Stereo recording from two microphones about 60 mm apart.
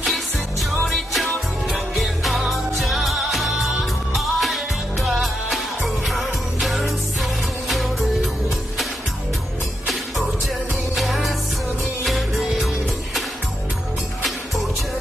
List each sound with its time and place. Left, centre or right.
0.0 s music: centre
9.8 s music: centre